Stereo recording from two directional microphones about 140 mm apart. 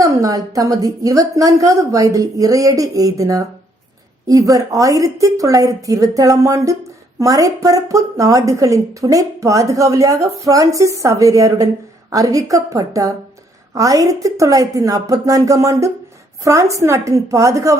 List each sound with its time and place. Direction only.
0.0 s speech: 25° right (ahead or behind)